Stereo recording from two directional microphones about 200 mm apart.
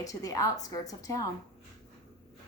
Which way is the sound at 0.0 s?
15° left (ahead or behind).